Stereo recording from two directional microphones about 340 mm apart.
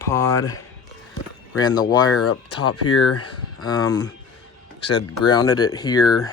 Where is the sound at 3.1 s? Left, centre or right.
Left.